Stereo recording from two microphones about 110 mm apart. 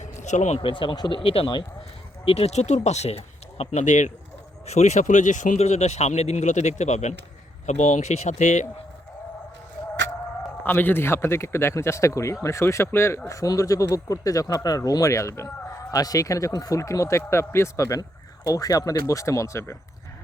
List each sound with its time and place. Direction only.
0.0 s a sound: 90° left
0.6 s speech: 50° left (ahead or behind)
2.2 s speech: 65° left (ahead or behind); by 8.6 s 90° left
10.6 s speech: 20° left (ahead or behind)